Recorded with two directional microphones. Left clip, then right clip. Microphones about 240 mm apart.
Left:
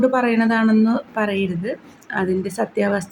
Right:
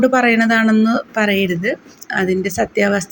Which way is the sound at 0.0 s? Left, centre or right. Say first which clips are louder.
Right 4 dB; centre.